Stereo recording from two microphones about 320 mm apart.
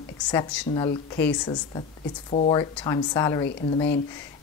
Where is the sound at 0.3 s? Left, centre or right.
Centre.